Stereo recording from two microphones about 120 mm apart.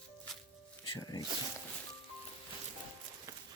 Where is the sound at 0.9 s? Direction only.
35° left (ahead or behind).